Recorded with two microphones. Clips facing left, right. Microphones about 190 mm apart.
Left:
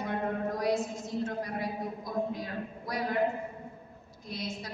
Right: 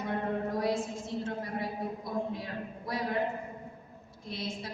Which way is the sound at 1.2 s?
25° right (ahead or behind).